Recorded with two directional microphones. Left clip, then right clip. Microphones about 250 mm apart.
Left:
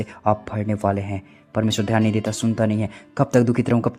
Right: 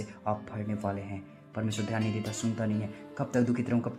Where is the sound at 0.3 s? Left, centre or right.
Left.